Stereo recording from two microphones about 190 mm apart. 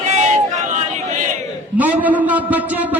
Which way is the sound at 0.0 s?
35° right (ahead or behind).